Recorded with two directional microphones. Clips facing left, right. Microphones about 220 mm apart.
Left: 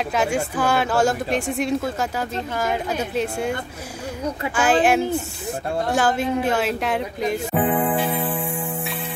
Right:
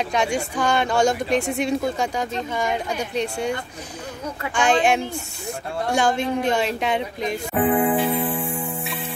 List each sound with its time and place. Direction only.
0.1 s speech: 5° left (ahead or behind)
4.6 s speech: 5° left (ahead or behind)